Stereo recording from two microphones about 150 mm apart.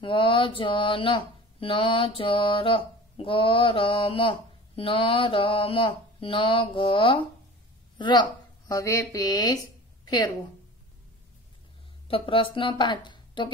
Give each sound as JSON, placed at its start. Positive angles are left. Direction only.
{"t": 0.0, "sound": "a woman's voice", "side_deg": 35}
{"t": 12.1, "sound": "speech", "side_deg": 35}